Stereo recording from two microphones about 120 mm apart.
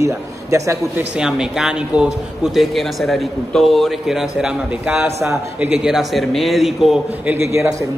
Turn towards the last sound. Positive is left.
turn(degrees=-25)  # may be behind; listen again after turning